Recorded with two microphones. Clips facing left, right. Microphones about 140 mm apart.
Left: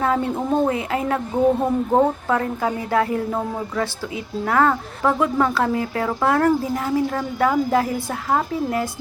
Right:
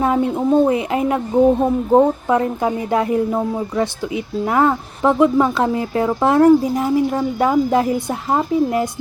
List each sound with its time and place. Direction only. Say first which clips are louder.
0.0 s speech: right 4 dB; 20° right (ahead or behind)